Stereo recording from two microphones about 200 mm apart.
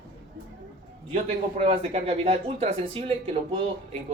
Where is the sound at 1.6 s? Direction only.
30° right (ahead or behind).